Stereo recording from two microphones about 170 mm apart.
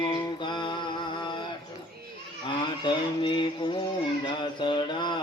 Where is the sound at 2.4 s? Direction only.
30° left (ahead or behind).